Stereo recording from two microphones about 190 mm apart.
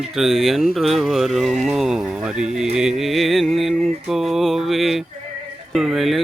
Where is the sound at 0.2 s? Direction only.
Centre (ahead or behind).